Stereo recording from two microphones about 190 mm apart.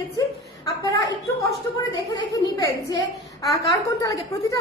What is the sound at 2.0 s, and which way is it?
Speech, 20° left (ahead or behind).